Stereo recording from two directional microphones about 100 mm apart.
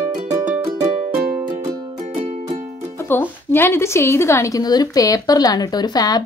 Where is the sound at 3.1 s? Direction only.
20° left (ahead or behind).